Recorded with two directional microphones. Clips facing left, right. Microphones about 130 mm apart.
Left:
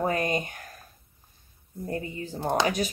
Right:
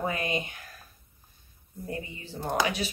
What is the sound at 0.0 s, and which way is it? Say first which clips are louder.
Speech: left 4 dB; 45° left (ahead or behind).